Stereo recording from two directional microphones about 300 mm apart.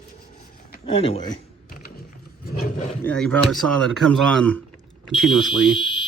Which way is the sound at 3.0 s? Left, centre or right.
Centre.